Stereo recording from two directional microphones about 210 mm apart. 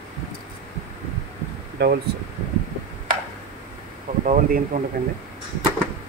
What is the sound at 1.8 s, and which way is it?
Speech, 50° right (ahead or behind).